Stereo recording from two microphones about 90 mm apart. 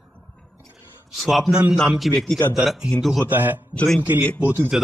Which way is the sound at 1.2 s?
Centre (ahead or behind).